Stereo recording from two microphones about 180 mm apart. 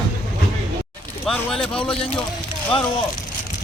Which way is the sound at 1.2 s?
5° left (ahead or behind).